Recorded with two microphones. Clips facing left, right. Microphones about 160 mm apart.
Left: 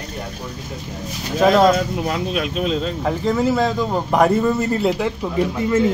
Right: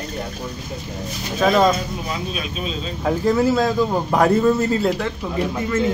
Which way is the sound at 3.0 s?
5° right (ahead or behind).